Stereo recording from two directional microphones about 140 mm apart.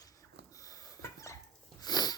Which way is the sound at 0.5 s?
25° left (ahead or behind).